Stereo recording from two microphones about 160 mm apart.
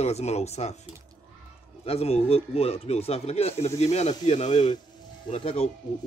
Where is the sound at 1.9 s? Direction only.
40° left (ahead or behind).